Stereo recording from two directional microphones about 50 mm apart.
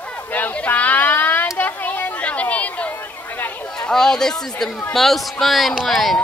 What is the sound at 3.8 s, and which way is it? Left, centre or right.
Speech, centre.